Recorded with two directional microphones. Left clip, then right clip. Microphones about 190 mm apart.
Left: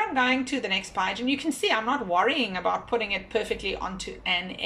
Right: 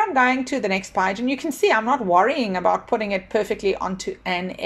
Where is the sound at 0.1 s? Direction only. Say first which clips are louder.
Right 5 dB; 35° right (ahead or behind).